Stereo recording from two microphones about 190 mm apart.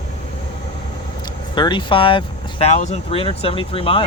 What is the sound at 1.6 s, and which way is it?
Speech, 25° left (ahead or behind).